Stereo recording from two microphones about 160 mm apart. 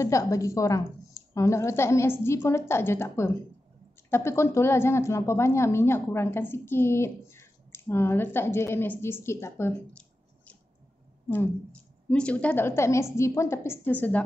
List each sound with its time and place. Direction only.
0.0 s a woman's voice: 20° left (ahead or behind)